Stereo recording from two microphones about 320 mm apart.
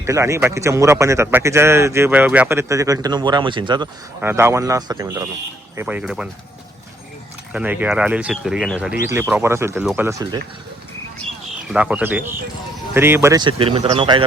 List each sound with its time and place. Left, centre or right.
0.0 s a man's voice: centre
7.5 s a man's voice: centre
11.7 s a man's voice: centre